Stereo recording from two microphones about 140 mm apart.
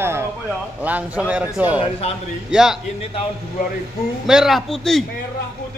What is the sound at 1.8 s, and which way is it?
Speech, 45° left (ahead or behind).